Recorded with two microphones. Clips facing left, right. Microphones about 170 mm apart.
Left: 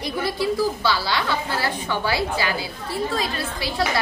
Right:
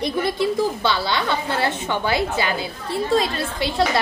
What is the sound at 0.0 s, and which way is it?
A woman's voice, 25° right (ahead or behind).